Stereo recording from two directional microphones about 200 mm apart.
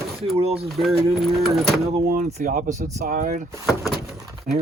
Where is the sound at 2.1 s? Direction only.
35° right (ahead or behind).